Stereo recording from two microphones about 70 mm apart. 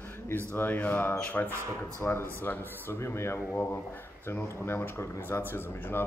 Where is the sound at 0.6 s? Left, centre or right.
Left.